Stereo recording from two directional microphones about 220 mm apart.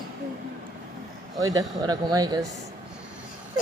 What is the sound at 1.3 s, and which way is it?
A man's voice, 15° right (ahead or behind).